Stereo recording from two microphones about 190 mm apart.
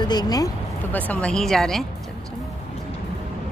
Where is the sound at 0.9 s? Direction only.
5° left (ahead or behind).